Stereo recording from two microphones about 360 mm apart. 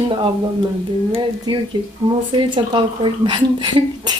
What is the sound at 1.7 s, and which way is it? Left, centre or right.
Speech, centre.